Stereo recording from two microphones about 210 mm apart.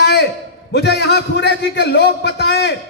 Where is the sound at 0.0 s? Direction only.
55° left (ahead or behind).